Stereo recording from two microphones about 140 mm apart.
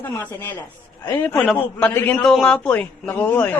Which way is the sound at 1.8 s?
10° left (ahead or behind).